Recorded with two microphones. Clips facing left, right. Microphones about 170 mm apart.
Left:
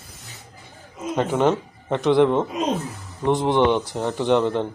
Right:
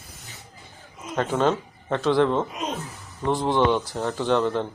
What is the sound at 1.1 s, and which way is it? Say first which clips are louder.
Speech: left 3 dB; 15° left (ahead or behind).